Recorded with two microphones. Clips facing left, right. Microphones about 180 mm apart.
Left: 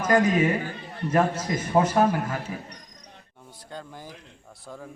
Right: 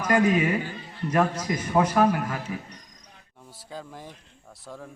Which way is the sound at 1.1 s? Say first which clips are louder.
Left 1 dB; 25° left (ahead or behind).